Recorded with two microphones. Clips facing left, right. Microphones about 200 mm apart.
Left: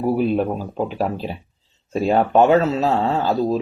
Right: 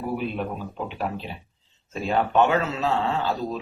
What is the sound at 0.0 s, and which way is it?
Speech, 40° left (ahead or behind).